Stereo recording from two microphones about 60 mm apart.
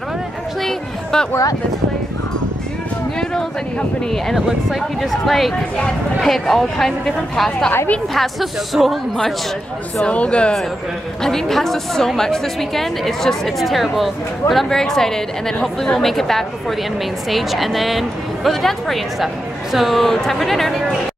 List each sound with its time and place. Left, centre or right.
0.6 s a sound: centre
4.4 s speech: centre
4.7 s a woman's voice: centre
10.0 s speech: centre
11.2 s a woman's voice: centre